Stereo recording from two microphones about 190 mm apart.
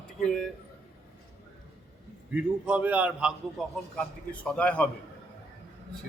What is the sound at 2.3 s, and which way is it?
A man's voice, 5° right (ahead or behind).